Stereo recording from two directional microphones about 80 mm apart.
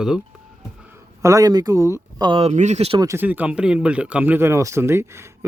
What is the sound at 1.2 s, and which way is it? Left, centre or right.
Speech, right.